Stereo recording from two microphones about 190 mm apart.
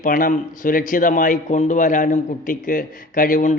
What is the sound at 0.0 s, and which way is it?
A man's voice, 45° left (ahead or behind).